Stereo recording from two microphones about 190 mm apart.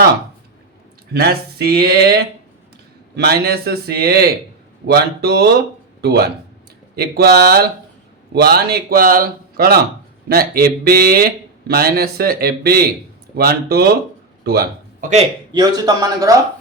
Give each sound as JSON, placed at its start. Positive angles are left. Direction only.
{"t": 1.1, "sound": "speech", "side_deg": -55}
{"t": 14.4, "sound": "a sound", "side_deg": -55}
{"t": 15.5, "sound": "a man's voice", "side_deg": -20}